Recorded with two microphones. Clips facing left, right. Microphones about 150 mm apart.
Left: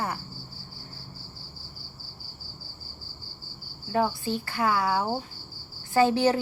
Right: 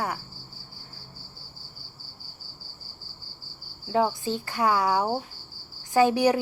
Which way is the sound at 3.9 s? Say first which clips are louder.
Right 2 dB; 20° right (ahead or behind).